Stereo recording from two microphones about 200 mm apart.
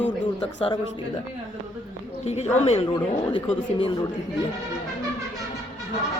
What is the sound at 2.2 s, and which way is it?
Speech, 35° left (ahead or behind).